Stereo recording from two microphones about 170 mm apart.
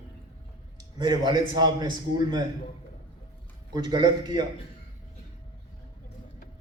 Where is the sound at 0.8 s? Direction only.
25° right (ahead or behind).